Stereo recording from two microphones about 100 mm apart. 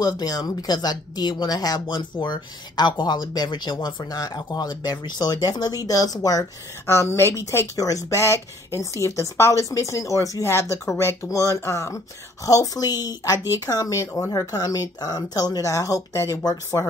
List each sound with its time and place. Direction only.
0.0 s speech: 40° left (ahead or behind)
6.9 s a woman's voice: 25° left (ahead or behind)